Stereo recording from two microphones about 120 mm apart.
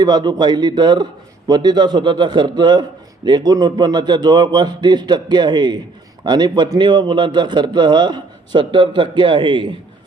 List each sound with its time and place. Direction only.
0.0 s a man's voice: 35° right (ahead or behind)